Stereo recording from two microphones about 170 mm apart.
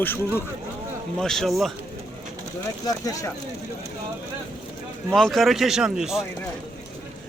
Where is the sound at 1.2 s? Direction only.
Centre (ahead or behind).